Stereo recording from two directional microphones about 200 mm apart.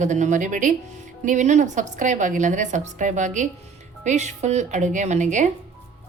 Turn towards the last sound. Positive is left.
turn(degrees=-35)  # may be behind; listen again after turning